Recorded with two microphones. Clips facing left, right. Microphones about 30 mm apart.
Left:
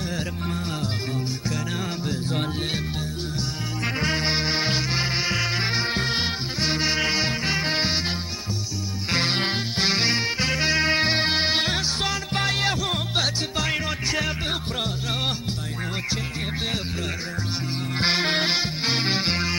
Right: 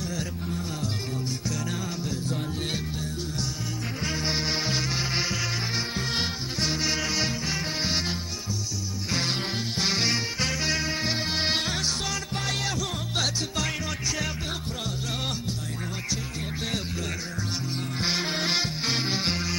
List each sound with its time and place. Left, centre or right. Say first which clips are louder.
3.8 s music: left 7 dB; left
4.4 s music: left 3 dB; left
9.1 s music: left 5 dB; left
9.8 s music: left 4 dB; left
10.8 s music: left 8 dB; left
11.4 s music: left 4 dB; left
18.0 s music: left 6 dB; left
18.5 s music: left 3 dB; left